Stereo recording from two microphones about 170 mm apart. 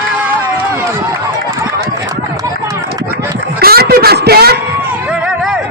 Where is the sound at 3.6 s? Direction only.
65° right (ahead or behind).